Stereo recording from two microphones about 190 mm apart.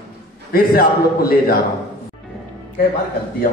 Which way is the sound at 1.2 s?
50° left (ahead or behind).